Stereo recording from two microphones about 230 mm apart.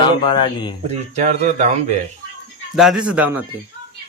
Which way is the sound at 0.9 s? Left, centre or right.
Right.